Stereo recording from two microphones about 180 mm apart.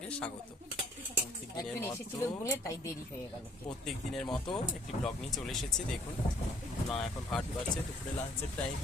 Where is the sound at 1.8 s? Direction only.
15° left (ahead or behind).